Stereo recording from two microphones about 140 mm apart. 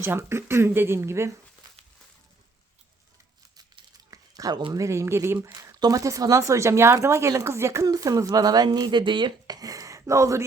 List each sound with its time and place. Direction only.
0.0 s speech: 20° right (ahead or behind)
3.6 s a sound: 30° right (ahead or behind)
5.5 s speech: 25° right (ahead or behind)